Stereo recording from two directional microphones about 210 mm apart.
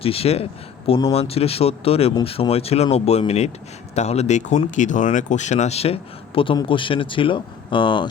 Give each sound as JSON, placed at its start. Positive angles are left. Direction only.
{"t": 0.0, "sound": "speech", "side_deg": 25}